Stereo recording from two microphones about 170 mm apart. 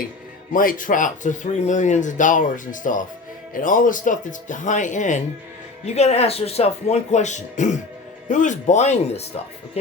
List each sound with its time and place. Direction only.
0.5 s speech: 55° left (ahead or behind)